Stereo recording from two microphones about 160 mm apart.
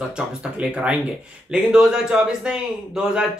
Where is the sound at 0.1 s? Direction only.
5° right (ahead or behind).